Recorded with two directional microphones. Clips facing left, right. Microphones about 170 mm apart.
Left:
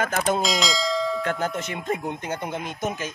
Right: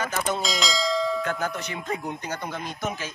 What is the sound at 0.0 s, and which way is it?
Speech, 50° left (ahead or behind).